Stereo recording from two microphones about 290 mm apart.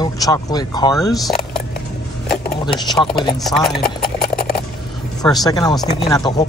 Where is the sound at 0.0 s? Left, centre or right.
Centre.